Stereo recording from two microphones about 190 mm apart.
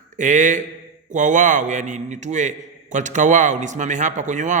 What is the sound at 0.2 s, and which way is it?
A man's voice, 40° right (ahead or behind).